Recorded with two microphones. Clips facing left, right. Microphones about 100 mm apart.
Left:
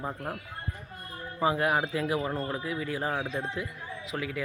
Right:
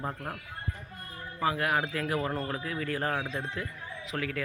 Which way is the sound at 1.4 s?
20° left (ahead or behind).